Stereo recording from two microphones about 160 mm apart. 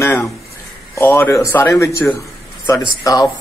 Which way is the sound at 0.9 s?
15° left (ahead or behind).